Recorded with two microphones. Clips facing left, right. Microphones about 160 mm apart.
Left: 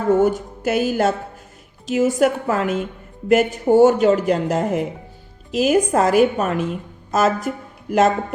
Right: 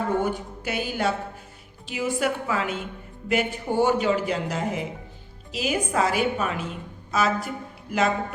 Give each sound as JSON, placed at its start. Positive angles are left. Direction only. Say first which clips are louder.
{"t": 0.2, "sound": "speech", "louder": "left 9 dB", "side_deg": 45}